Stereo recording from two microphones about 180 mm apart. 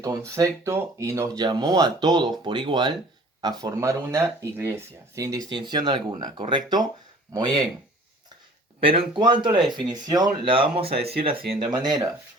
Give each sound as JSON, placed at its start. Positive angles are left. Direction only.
{"t": 0.0, "sound": "speech", "side_deg": -20}
{"t": 8.8, "sound": "speech", "side_deg": -30}